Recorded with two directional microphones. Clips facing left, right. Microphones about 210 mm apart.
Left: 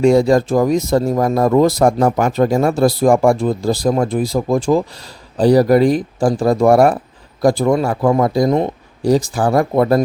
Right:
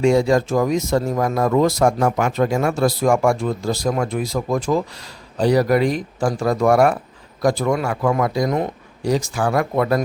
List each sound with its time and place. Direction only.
0.0 s speech: 35° left (ahead or behind)